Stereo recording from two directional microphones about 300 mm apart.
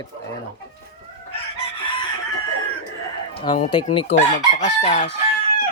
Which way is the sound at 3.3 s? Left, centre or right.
Centre.